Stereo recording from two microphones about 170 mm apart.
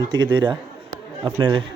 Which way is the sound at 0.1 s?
25° right (ahead or behind).